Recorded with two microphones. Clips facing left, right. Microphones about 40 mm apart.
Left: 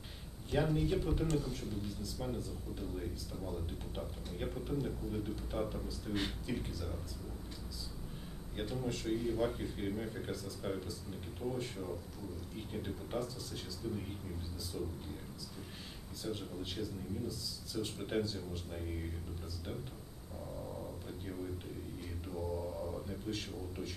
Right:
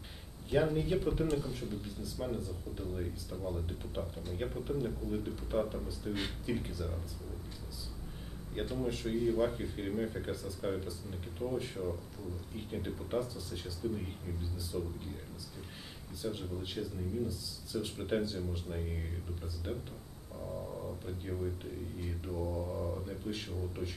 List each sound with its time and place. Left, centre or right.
0.5 s speech: centre
8.5 s speech: centre
14.7 s speech: centre
16.2 s speech: centre
21.0 s speech: centre